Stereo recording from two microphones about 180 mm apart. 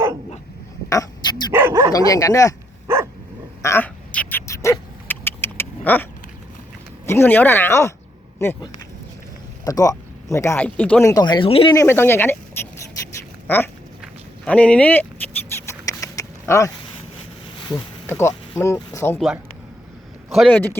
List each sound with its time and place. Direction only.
0.9 s a sound: 20° left (ahead or behind)
1.5 s speech: 15° right (ahead or behind)
1.9 s speech: 20° left (ahead or behind)
2.8 s dog: 15° right (ahead or behind)
3.6 s a sound: 15° left (ahead or behind)
7.0 s speech: 15° left (ahead or behind)
9.6 s speech: 20° left (ahead or behind)
11.1 s speech: 25° left (ahead or behind)
11.7 s speech: 15° left (ahead or behind)
14.4 s speech: 5° left (ahead or behind)
15.9 s a sound: 20° left (ahead or behind)
18.1 s speech: 15° left (ahead or behind)
20.3 s speech: centre (ahead or behind)